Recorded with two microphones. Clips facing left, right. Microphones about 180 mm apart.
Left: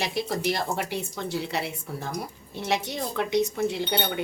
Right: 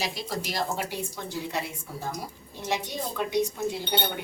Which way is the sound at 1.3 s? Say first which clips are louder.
Left 4 dB; 75° left (ahead or behind).